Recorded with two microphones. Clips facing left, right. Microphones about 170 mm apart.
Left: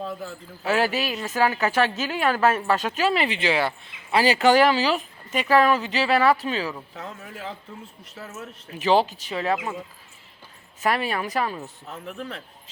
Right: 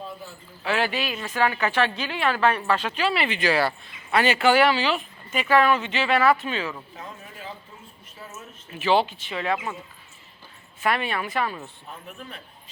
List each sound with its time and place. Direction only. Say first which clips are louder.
0.6 s a woman's voice: left 2 dB; 40° left (ahead or behind)
3.3 s speech: right 1 dB; 20° left (ahead or behind)
4.2 s speech: left 2 dB; 35° left (ahead or behind)
6.9 s a man's voice: left 3 dB; 70° left (ahead or behind)
8.8 s speech: left 1 dB; 40° left (ahead or behind)
10.8 s speech: left 1 dB; 35° left (ahead or behind)